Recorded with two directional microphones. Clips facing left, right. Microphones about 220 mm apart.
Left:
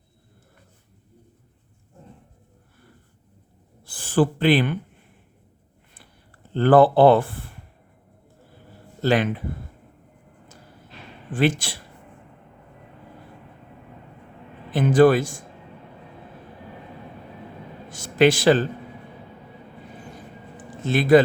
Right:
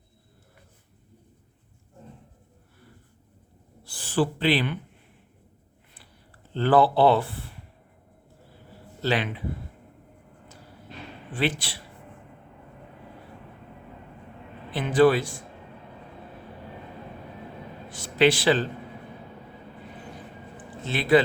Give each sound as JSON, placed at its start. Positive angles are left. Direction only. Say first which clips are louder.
{"t": 3.8, "sound": "speech", "louder": "left 5 dB", "side_deg": 50}
{"t": 6.5, "sound": "speech", "louder": "left 5 dB", "side_deg": 50}
{"t": 9.0, "sound": "a man's voice", "louder": "left 6 dB", "side_deg": 45}
{"t": 11.3, "sound": "a man's voice", "louder": "left 6 dB", "side_deg": 45}
{"t": 14.7, "sound": "a man's voice", "louder": "left 4 dB", "side_deg": 45}
{"t": 17.9, "sound": "a sound", "louder": "left 3 dB", "side_deg": 45}
{"t": 20.8, "sound": "a man's voice", "louder": "left 5 dB", "side_deg": 45}